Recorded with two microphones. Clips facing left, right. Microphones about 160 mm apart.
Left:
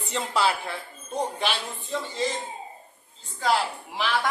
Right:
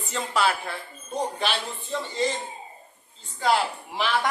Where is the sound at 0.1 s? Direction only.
25° left (ahead or behind).